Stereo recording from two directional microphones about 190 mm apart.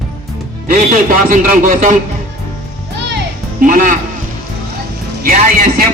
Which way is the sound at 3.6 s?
45° right (ahead or behind).